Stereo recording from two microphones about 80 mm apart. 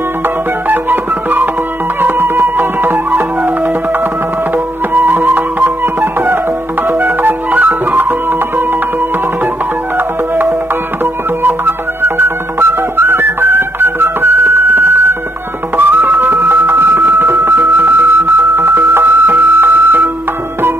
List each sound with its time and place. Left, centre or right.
0.7 s music: right
4.9 s music: right
9.9 s music: right